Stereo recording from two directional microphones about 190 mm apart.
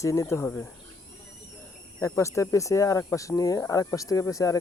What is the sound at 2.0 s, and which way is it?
Speech, 15° left (ahead or behind).